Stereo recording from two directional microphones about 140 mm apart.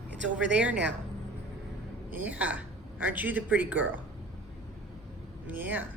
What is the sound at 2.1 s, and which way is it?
Speech, 10° right (ahead or behind).